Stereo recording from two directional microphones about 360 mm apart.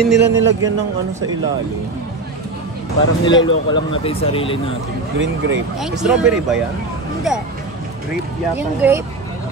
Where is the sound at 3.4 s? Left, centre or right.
Centre.